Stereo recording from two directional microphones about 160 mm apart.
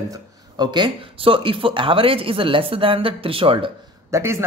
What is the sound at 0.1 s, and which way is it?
Speech, 25° right (ahead or behind).